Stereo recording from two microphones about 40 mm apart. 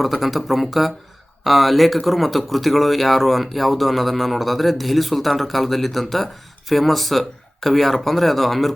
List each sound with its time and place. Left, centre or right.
0.0 s speech: centre